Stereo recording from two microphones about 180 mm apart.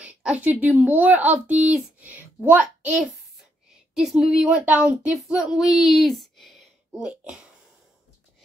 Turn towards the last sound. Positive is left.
turn(degrees=-5)  # may be behind; listen again after turning